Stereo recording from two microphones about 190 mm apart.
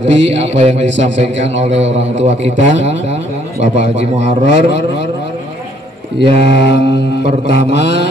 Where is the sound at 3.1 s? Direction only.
35° right (ahead or behind).